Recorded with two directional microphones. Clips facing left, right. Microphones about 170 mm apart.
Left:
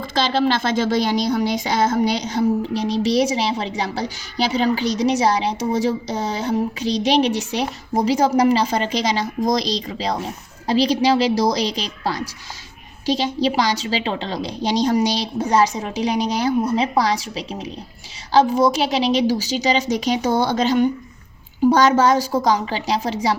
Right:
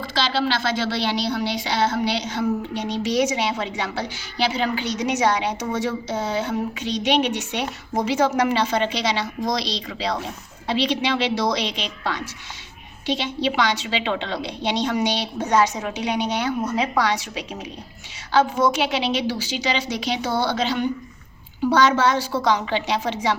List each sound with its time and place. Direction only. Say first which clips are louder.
0.0 s a woman's voice: left 4 dB; 45° left (ahead or behind)